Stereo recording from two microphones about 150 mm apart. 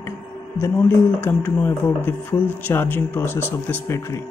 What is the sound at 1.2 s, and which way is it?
Speech, 15° left (ahead or behind).